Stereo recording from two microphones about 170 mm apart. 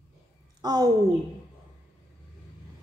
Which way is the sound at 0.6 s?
20° right (ahead or behind).